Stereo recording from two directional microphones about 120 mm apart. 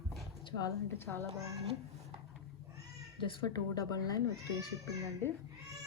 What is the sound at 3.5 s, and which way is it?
Speech, 35° left (ahead or behind).